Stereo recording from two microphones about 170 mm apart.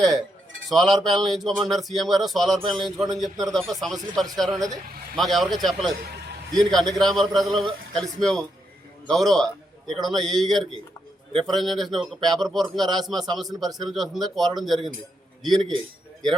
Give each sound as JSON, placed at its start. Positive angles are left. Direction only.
{"t": 0.7, "sound": "a man's voice", "side_deg": 0}
{"t": 11.3, "sound": "a man's voice", "side_deg": -30}
{"t": 11.5, "sound": "speech", "side_deg": 0}